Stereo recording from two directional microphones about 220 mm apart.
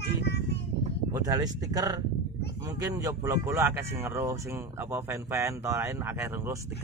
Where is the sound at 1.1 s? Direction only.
15° right (ahead or behind).